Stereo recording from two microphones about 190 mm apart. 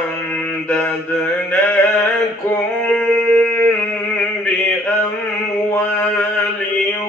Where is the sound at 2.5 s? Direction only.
10° left (ahead or behind).